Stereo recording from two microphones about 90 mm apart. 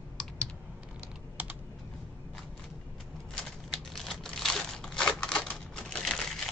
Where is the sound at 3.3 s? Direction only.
5° left (ahead or behind).